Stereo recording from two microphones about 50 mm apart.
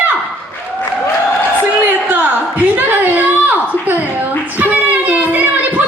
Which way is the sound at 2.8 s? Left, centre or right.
Right.